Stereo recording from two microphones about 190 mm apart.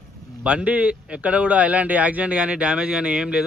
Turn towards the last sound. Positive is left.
turn(degrees=-5)  # may be behind; listen again after turning